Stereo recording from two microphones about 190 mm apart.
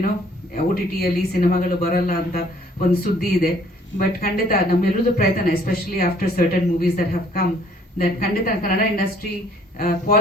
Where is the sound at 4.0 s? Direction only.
50° left (ahead or behind).